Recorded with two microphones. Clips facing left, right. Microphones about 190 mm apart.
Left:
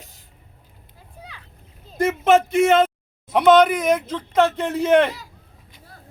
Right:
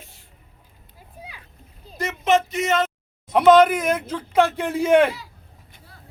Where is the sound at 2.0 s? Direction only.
50° left (ahead or behind).